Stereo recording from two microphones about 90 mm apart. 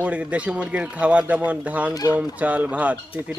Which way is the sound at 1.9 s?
45° left (ahead or behind).